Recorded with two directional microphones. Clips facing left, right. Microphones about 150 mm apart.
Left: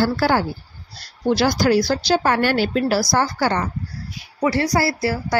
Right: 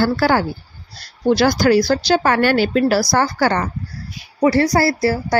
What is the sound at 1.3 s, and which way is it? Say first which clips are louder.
Speech: right 3 dB; 70° right (ahead or behind).